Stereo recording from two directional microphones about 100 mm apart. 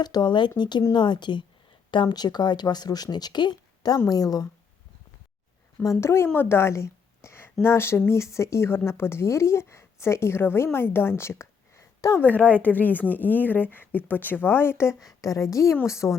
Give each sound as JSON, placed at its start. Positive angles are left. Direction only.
{"t": 0.0, "sound": "speech", "side_deg": 45}
{"t": 5.8, "sound": "a woman's voice", "side_deg": 30}
{"t": 12.2, "sound": "a woman's voice", "side_deg": 15}